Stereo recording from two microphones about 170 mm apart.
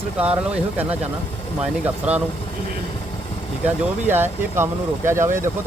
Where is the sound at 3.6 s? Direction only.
10° right (ahead or behind).